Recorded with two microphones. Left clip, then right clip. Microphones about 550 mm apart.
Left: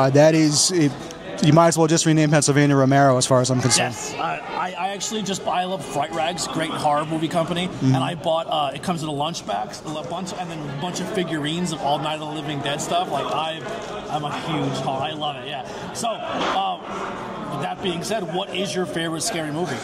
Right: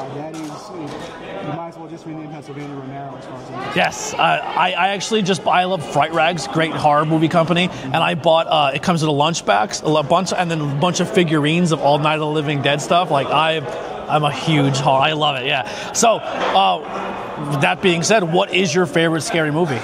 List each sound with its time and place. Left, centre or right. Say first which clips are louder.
3.7 s a man's voice: right 4 dB; right